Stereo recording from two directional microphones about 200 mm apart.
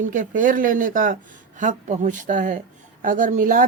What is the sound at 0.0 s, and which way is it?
A woman's voice, 40° right (ahead or behind).